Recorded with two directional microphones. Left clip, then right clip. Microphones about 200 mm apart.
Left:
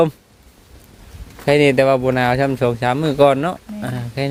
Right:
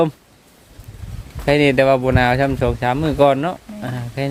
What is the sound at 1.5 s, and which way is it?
Speech, 10° left (ahead or behind).